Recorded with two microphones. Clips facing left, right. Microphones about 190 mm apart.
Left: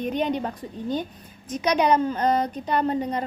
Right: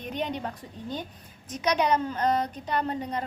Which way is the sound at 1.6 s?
15° left (ahead or behind).